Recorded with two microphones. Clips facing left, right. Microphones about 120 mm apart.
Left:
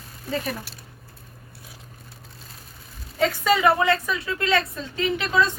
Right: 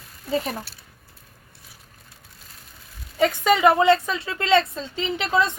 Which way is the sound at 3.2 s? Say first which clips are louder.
Right 2 dB; 20° right (ahead or behind).